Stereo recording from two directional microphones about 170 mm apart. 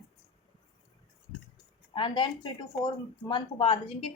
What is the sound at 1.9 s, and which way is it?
A woman's voice, 30° left (ahead or behind).